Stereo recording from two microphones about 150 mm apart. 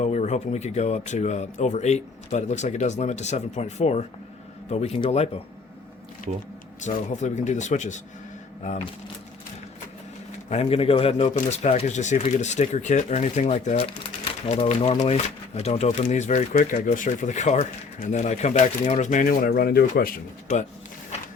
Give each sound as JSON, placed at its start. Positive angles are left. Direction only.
{"t": 0.0, "sound": "speech", "side_deg": 50}
{"t": 6.8, "sound": "speech", "side_deg": 55}
{"t": 10.5, "sound": "speech", "side_deg": 40}